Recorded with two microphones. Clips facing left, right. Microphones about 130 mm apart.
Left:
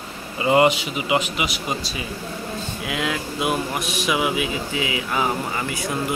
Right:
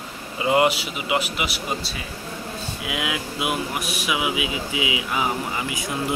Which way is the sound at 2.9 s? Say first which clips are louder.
Left 2 dB; 10° right (ahead or behind).